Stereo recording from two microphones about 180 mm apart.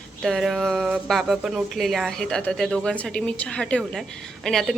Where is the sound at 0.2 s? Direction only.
Centre (ahead or behind).